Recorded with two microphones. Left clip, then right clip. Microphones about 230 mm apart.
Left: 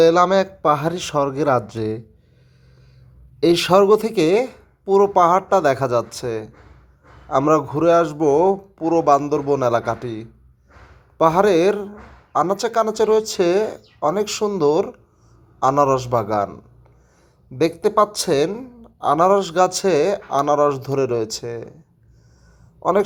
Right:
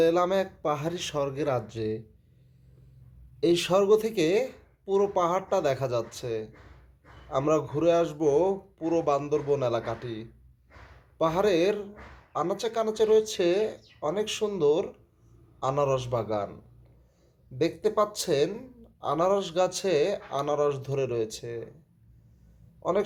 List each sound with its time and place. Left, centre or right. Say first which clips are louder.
0.0 s speech: left 10 dB; centre
3.4 s speech: left 9 dB; left
17.6 s speech: left 9 dB; left
22.8 s speech: left 9 dB; left